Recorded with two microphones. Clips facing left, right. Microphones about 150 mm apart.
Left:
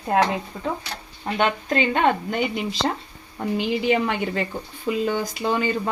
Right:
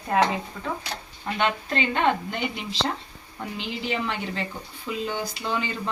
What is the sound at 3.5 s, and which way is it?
Speech, 55° left (ahead or behind).